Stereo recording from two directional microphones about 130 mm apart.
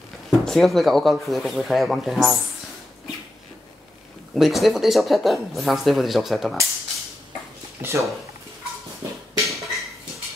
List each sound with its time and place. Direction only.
0.3 s speech: centre (ahead or behind)
4.4 s speech: centre (ahead or behind)
7.8 s speech: 20° right (ahead or behind)
9.4 s a sound: centre (ahead or behind)